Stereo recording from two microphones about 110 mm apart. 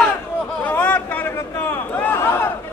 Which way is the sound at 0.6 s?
15° left (ahead or behind).